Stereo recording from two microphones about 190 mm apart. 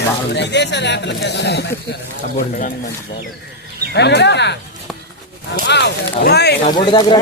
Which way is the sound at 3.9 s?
65° left (ahead or behind).